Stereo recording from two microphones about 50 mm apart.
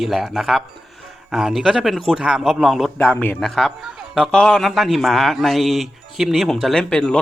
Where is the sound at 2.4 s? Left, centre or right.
Centre.